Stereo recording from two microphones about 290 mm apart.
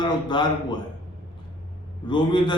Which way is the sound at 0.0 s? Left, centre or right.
Centre.